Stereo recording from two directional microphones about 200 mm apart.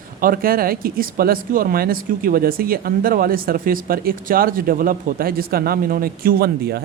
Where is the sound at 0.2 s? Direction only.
45° right (ahead or behind).